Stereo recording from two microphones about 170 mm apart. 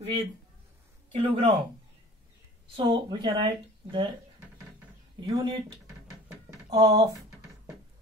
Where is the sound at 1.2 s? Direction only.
30° right (ahead or behind).